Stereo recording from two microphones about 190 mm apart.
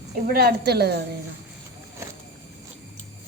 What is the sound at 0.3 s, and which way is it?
Speech, 55° right (ahead or behind).